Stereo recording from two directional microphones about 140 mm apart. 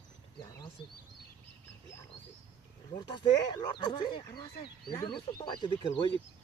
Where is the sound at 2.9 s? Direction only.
30° left (ahead or behind).